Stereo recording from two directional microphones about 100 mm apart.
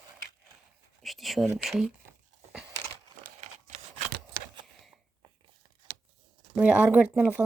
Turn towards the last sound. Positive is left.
turn(degrees=-15)  # may be behind; listen again after turning